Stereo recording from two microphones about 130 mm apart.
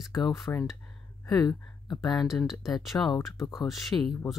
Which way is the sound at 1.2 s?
30° left (ahead or behind).